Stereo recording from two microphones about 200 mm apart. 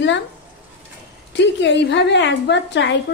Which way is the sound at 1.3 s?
60° left (ahead or behind).